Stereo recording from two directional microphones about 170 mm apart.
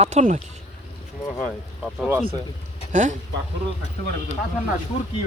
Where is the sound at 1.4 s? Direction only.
Centre (ahead or behind).